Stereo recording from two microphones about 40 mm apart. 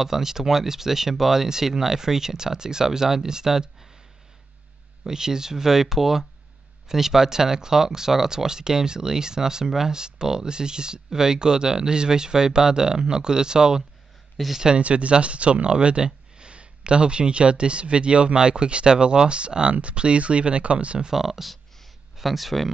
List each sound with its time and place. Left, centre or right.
0.0 s speech: centre
5.0 s speech: centre
14.8 s speech: right
21.1 s speech: centre